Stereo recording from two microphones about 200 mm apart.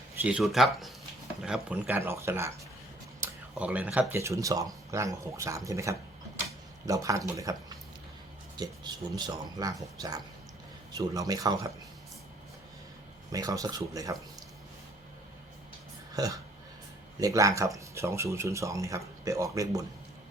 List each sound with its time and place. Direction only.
0.2 s speech: 5° right (ahead or behind)
8.5 s speech: 20° right (ahead or behind)
13.3 s speech: 15° right (ahead or behind)
16.1 s speech: 20° right (ahead or behind)